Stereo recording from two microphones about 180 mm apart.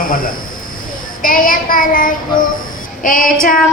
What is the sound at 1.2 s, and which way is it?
Child singing, 50° left (ahead or behind).